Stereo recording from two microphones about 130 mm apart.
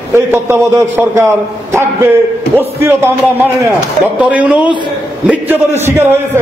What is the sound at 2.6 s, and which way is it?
A man's voice, 20° right (ahead or behind).